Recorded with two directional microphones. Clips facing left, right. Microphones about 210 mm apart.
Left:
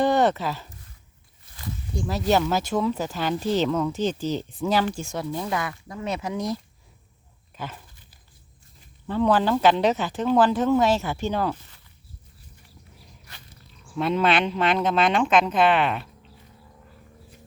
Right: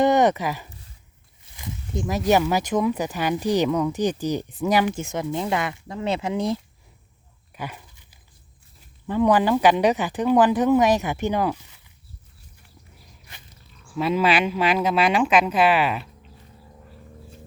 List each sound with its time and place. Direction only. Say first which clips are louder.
0.0 s a sound: right 2 dB; 15° right (ahead or behind)
2.5 s speech: right 2 dB; 15° right (ahead or behind)
7.5 s dog: right 2 dB; 10° right (ahead or behind)
9.0 s speech: right 2 dB; 15° right (ahead or behind)
13.8 s speech: right 1 dB; 5° right (ahead or behind)